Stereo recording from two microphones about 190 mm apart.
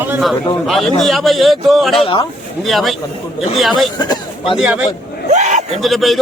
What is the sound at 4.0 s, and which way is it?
Speech, 25° left (ahead or behind).